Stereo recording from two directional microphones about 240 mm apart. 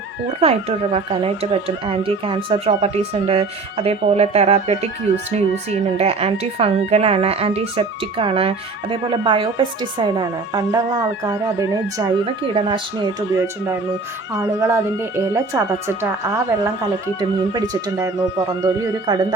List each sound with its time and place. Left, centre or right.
0.3 s speech: right
6.0 s speech: right